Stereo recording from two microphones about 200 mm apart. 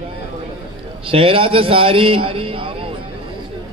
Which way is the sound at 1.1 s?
25° right (ahead or behind).